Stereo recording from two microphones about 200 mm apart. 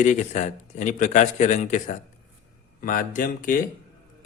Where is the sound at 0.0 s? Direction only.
40° left (ahead or behind).